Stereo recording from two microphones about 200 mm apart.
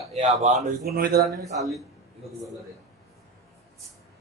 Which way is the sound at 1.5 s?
Centre (ahead or behind).